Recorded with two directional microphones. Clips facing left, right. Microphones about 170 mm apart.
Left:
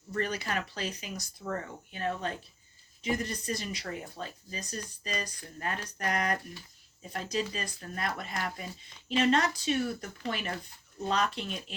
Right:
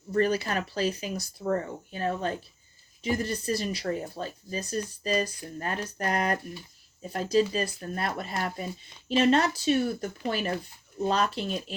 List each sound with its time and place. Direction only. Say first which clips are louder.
0.1 s speech: right 7 dB; 30° right (ahead or behind)